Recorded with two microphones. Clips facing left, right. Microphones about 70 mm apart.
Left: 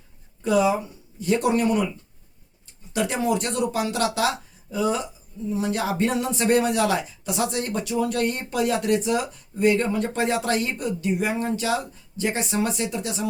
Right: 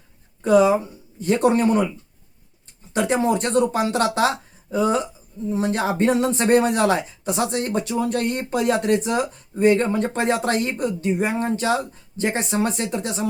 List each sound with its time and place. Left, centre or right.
0.4 s speech: right
2.9 s speech: right